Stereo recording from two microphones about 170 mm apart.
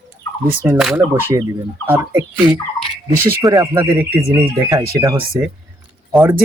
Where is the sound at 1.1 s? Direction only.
10° right (ahead or behind).